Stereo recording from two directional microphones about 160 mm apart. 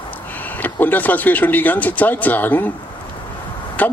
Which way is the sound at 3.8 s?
10° left (ahead or behind).